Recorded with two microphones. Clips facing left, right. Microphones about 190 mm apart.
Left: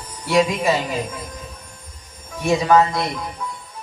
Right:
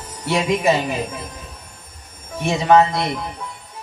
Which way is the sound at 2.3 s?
25° right (ahead or behind).